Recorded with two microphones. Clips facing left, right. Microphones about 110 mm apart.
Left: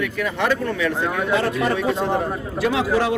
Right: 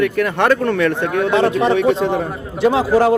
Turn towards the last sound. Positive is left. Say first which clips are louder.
# right 6 dB
turn(degrees=-35)  # may be behind; listen again after turning